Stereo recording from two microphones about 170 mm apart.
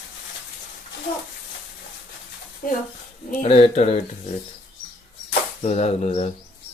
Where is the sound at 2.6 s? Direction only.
55° left (ahead or behind).